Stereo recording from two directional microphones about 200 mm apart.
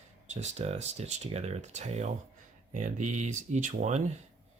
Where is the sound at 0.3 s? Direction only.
35° right (ahead or behind).